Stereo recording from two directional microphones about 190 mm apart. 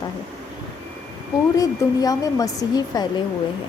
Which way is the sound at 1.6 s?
20° left (ahead or behind).